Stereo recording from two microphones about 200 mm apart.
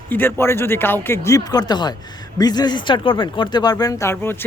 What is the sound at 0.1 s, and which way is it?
Speech, 10° left (ahead or behind).